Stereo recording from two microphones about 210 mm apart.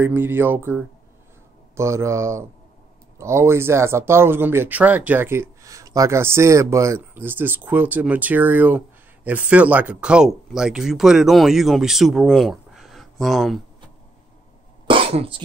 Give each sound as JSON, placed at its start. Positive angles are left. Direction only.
{"t": 0.0, "sound": "speech", "side_deg": -10}
{"t": 14.9, "sound": "cough", "side_deg": -25}